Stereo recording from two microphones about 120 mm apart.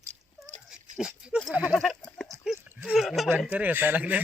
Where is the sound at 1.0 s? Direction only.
5° right (ahead or behind).